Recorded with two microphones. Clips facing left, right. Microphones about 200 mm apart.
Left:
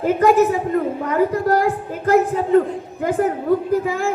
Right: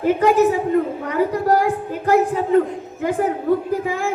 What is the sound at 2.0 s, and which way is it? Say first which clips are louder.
Speech: left 1 dB; 40° left (ahead or behind).